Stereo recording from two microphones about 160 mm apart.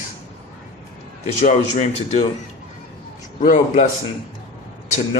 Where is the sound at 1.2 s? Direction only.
45° left (ahead or behind).